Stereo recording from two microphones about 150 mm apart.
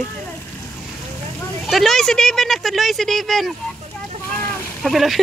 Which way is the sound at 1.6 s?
Centre (ahead or behind).